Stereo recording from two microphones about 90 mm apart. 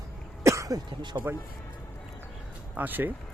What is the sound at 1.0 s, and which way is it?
Speech, 60° right (ahead or behind).